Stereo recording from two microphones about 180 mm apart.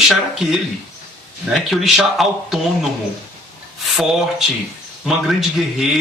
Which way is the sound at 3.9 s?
Centre (ahead or behind).